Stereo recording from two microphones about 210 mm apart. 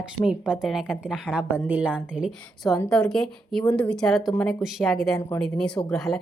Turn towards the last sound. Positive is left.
turn(degrees=0)  # may be behind; listen again after turning